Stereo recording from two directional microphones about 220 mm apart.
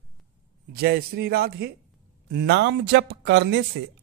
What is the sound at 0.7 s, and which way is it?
Speech, 45° right (ahead or behind).